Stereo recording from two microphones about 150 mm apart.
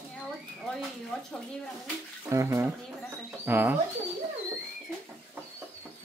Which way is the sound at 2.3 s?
20° right (ahead or behind).